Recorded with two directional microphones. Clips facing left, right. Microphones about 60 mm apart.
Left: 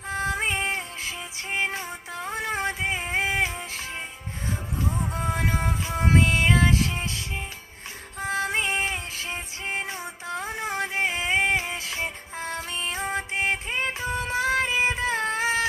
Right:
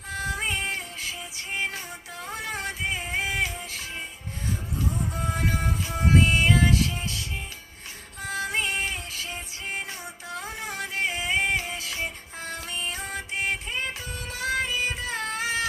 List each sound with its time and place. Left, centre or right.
0.1 s music: left
4.8 s music: left
8.2 s music: left